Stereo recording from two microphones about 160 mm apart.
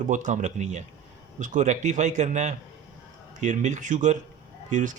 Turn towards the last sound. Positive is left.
turn(degrees=-50)  # may be behind; listen again after turning